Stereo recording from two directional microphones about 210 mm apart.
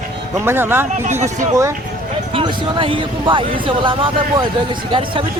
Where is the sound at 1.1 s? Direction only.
35° right (ahead or behind).